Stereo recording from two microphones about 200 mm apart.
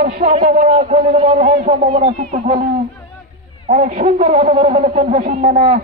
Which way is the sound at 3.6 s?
40° right (ahead or behind).